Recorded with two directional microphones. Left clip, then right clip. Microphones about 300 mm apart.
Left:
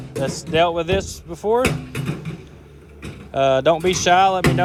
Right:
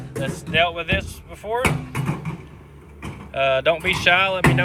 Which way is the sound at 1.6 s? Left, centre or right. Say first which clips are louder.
Left 1 dB; centre.